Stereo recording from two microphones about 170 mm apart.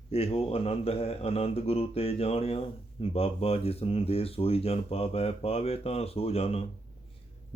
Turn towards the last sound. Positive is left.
turn(degrees=35)  # may be behind; listen again after turning